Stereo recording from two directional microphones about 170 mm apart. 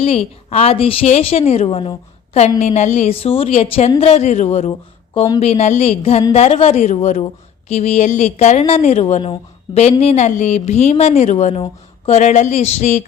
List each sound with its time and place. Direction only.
0.0 s a woman's voice: 35° left (ahead or behind)